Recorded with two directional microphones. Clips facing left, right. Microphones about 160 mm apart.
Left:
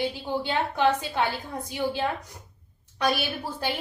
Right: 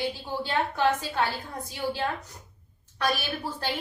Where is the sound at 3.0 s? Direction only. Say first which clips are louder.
Left 2 dB; 15° left (ahead or behind).